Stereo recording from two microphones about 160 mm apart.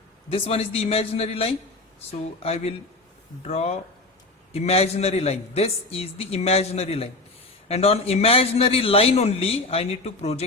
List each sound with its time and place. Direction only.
0.3 s a man's voice: 35° left (ahead or behind)